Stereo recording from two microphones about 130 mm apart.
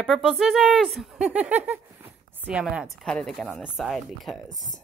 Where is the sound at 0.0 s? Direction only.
Centre (ahead or behind).